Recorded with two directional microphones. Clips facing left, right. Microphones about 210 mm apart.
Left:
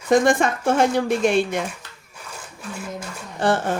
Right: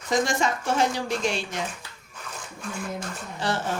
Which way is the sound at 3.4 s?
55° left (ahead or behind).